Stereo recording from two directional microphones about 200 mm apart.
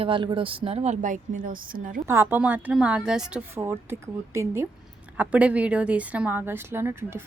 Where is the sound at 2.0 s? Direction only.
10° right (ahead or behind).